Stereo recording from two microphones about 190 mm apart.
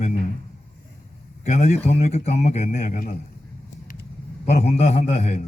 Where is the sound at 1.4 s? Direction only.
40° left (ahead or behind).